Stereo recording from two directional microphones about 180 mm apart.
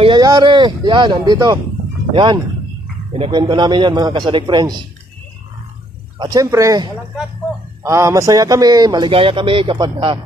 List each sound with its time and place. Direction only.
0.0 s a man's voice: 25° right (ahead or behind)
6.1 s a man's voice: 20° right (ahead or behind)